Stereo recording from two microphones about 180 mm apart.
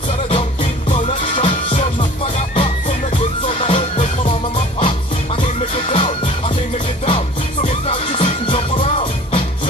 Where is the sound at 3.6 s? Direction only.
30° left (ahead or behind).